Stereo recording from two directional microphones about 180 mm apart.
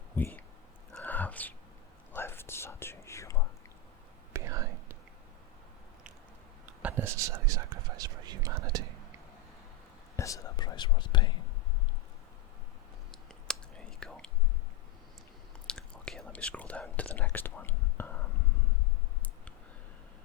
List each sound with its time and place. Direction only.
0.2 s speech: 10° left (ahead or behind)
0.9 s whispering: 10° left (ahead or behind)
4.3 s whispering: 15° right (ahead or behind)
6.8 s whispering: 10° right (ahead or behind)
10.2 s whispering: 20° left (ahead or behind)
13.1 s whispering: 5° left (ahead or behind)
15.6 s whispering: 5° left (ahead or behind)